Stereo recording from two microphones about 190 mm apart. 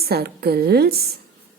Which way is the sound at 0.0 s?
55° right (ahead or behind).